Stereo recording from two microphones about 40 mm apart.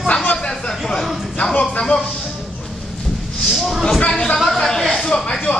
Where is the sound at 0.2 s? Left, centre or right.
Left.